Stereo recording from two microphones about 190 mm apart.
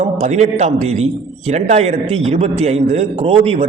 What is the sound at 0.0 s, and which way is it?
A man's voice, 35° right (ahead or behind).